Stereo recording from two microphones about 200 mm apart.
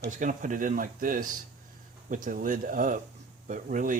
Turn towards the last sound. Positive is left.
turn(degrees=-40)  # may be behind; listen again after turning